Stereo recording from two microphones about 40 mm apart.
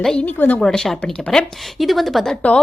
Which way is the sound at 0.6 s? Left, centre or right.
Centre.